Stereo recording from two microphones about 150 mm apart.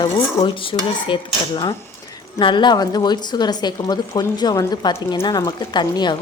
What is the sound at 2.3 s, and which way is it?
A woman's voice, 30° left (ahead or behind).